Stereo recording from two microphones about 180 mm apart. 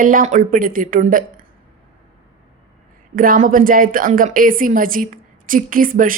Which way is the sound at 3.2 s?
50° right (ahead or behind).